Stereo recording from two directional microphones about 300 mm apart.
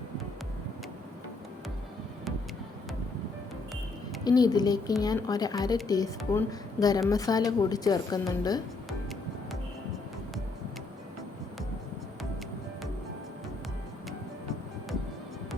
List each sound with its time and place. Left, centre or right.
4.2 s a woman's voice: centre
8.9 s music: centre